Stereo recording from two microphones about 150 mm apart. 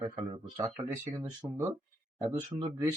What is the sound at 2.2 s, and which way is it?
Speech, 25° right (ahead or behind).